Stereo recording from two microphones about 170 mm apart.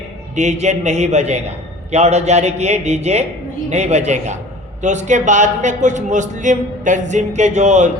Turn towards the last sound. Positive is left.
turn(degrees=-40)  # may be behind; listen again after turning